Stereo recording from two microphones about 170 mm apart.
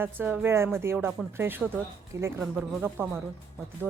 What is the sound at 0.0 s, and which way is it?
Speech, 10° right (ahead or behind).